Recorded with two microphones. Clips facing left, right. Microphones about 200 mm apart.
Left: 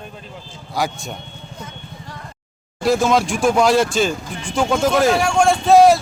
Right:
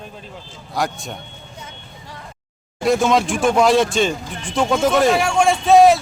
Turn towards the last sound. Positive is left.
turn(degrees=0)  # may be behind; listen again after turning